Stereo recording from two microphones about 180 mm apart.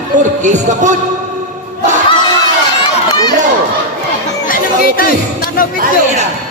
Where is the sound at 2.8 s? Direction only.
25° left (ahead or behind).